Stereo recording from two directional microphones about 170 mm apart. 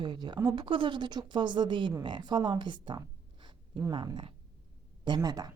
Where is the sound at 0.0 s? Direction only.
25° right (ahead or behind).